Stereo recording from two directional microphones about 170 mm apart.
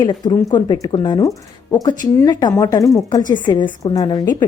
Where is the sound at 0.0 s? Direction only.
25° left (ahead or behind).